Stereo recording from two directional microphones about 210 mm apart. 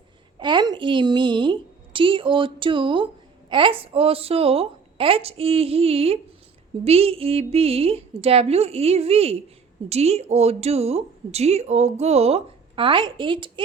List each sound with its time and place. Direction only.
0.3 s a woman's voice: 20° right (ahead or behind)